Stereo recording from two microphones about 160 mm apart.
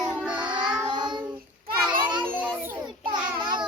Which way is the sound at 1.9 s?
30° right (ahead or behind).